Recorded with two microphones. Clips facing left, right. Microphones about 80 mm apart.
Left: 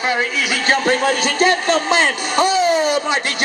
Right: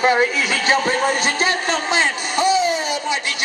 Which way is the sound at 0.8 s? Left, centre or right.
Left.